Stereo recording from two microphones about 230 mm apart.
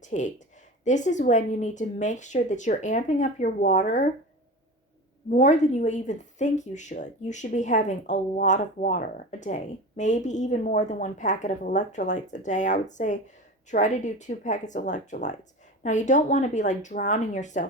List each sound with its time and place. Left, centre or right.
0.0 s a woman's voice: left
5.3 s a woman's voice: left